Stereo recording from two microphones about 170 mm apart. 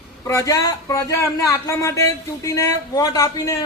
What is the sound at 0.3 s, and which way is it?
A man's voice, 20° left (ahead or behind).